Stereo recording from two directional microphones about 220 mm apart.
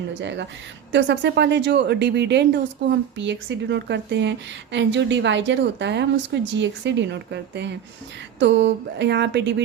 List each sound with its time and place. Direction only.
0.1 s a woman's voice: 55° right (ahead or behind)